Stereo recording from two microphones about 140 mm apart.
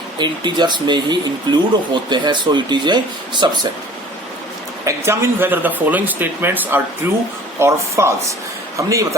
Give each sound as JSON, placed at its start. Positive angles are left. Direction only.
{"t": 0.2, "sound": "speech", "side_deg": -30}
{"t": 4.9, "sound": "speech", "side_deg": -15}